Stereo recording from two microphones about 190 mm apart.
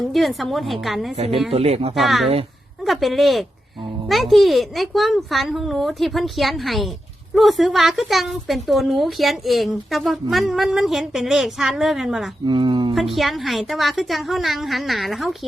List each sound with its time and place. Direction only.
0.1 s a woman's voice: centre (ahead or behind)
1.5 s speech: 30° right (ahead or behind)
2.0 s a woman's voice: centre (ahead or behind)
12.5 s speech: 25° right (ahead or behind)
12.9 s a woman's voice: centre (ahead or behind)